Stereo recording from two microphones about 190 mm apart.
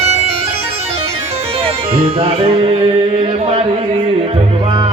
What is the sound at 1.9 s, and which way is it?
Music, 30° right (ahead or behind).